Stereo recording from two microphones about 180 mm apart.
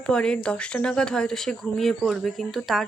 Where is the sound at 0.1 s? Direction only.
5° left (ahead or behind).